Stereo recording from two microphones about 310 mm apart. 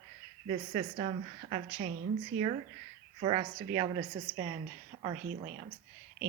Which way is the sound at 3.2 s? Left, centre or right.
Centre.